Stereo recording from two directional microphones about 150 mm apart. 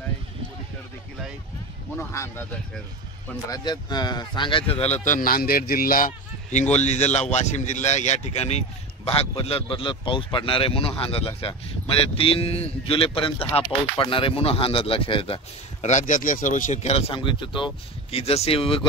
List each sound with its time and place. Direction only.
2.0 s speech: 15° left (ahead or behind)
3.4 s speech: 25° left (ahead or behind)
18.1 s speech: 45° left (ahead or behind)